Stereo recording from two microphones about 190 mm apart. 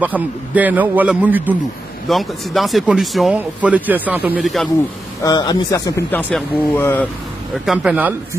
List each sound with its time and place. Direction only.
0.0 s a man's voice: 10° right (ahead or behind)
5.2 s a man's voice: 20° left (ahead or behind)
7.5 s speech: centre (ahead or behind)